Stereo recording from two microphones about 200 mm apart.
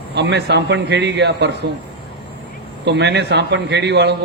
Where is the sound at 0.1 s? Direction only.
55° right (ahead or behind).